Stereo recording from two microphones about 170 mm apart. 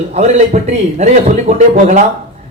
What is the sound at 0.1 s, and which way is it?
A man's voice, 40° right (ahead or behind).